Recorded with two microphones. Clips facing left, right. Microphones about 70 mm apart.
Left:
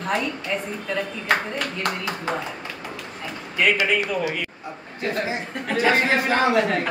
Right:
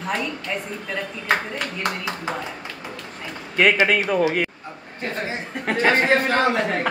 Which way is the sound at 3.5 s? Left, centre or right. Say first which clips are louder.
Right 3 dB; right.